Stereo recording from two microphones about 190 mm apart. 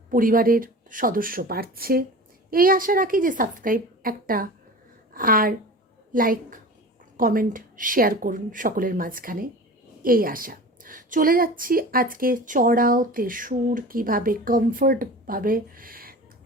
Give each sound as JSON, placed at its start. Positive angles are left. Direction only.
{"t": 0.1, "sound": "a woman's voice", "side_deg": -45}